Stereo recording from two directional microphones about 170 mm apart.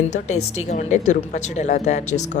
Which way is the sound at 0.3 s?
45° left (ahead or behind).